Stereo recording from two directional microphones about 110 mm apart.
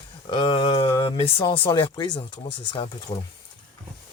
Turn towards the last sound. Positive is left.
turn(degrees=50)  # may be behind; listen again after turning